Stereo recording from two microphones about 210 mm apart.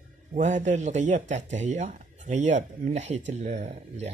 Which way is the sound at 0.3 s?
35° right (ahead or behind).